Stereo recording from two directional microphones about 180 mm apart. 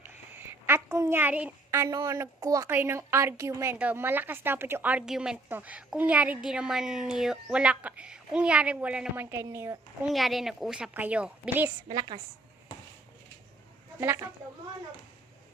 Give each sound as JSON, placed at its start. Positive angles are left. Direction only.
{"t": 0.3, "sound": "a woman's voice", "side_deg": -10}
{"t": 10.1, "sound": "a woman's voice", "side_deg": 0}
{"t": 11.9, "sound": "a woman's voice", "side_deg": -25}
{"t": 14.0, "sound": "a woman's voice", "side_deg": -10}